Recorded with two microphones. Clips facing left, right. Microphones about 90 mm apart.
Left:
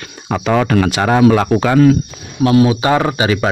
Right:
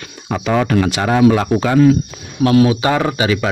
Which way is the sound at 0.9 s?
45° left (ahead or behind).